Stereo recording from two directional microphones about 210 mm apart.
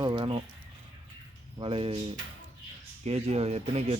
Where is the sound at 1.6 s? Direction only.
25° right (ahead or behind).